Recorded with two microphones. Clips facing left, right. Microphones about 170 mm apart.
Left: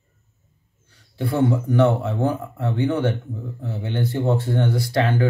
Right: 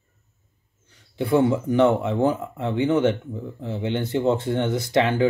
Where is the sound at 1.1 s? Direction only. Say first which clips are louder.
Right 1 dB; 15° right (ahead or behind).